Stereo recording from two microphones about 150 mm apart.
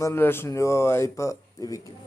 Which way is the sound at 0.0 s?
15° left (ahead or behind).